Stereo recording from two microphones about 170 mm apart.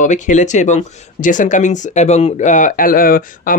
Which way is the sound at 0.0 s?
45° left (ahead or behind).